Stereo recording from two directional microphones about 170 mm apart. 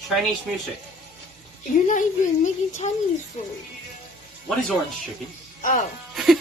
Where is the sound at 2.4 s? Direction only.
45° left (ahead or behind).